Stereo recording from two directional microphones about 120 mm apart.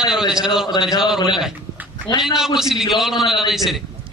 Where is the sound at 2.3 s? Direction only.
5° right (ahead or behind).